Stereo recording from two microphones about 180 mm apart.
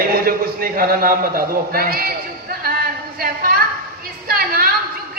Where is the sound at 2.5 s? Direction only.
55° right (ahead or behind).